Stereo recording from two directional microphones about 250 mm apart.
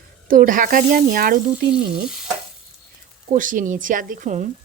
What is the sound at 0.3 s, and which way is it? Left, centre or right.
Speech, right.